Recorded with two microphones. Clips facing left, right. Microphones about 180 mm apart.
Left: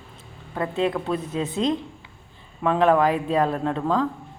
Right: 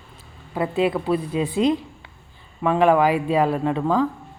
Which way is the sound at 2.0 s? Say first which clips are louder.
Right 1 dB; 65° right (ahead or behind).